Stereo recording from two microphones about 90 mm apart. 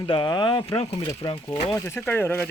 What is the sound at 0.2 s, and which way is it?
Speech, 55° left (ahead or behind).